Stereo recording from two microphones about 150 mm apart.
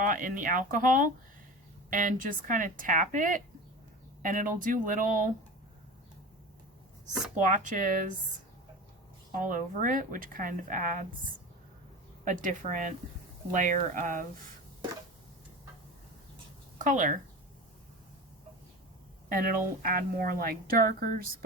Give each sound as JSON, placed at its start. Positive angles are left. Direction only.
{"t": 0.0, "sound": "speech", "side_deg": -65}
{"t": 7.3, "sound": "speech", "side_deg": -55}
{"t": 9.3, "sound": "speech", "side_deg": -65}
{"t": 12.2, "sound": "speech", "side_deg": -60}
{"t": 16.7, "sound": "speech", "side_deg": -60}
{"t": 19.3, "sound": "a woman's voice", "side_deg": -70}